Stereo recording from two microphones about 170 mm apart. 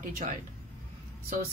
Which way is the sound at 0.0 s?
45° right (ahead or behind).